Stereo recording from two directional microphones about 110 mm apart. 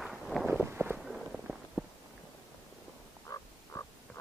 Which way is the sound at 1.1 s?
5° right (ahead or behind).